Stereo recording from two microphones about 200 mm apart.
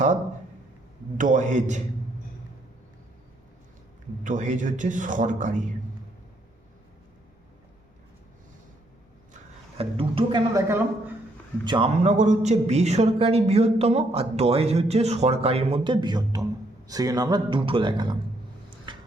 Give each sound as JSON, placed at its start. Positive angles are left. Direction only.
{"t": 1.2, "sound": "a man's voice", "side_deg": -40}
{"t": 4.2, "sound": "a man's voice", "side_deg": -40}
{"t": 9.3, "sound": "a sound", "side_deg": -30}
{"t": 11.6, "sound": "speech", "side_deg": -20}
{"t": 12.0, "sound": "speech", "side_deg": -35}
{"t": 18.9, "sound": "tick-tock", "side_deg": -25}